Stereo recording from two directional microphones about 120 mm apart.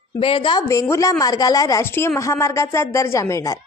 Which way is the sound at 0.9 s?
30° left (ahead or behind).